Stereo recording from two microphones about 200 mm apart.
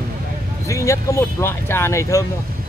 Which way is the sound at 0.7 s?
15° left (ahead or behind).